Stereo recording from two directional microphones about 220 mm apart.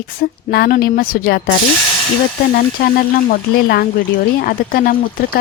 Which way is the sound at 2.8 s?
40° left (ahead or behind).